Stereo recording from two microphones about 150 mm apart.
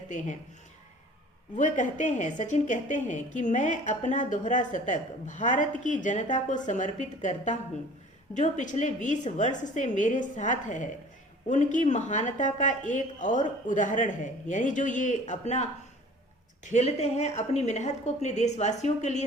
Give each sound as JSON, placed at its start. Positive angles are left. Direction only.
{"t": 1.5, "sound": "a woman's voice", "side_deg": 55}
{"t": 16.6, "sound": "a woman's voice", "side_deg": 50}